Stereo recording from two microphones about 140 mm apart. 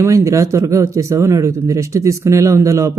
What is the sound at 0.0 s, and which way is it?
Speech, 20° right (ahead or behind).